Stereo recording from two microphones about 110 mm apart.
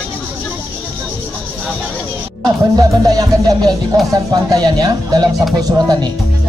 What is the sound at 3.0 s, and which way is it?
Speech, 40° right (ahead or behind).